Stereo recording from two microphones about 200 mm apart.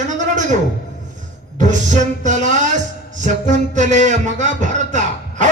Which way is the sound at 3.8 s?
35° right (ahead or behind).